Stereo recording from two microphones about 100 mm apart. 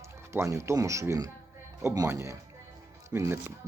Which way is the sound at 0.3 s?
30° right (ahead or behind).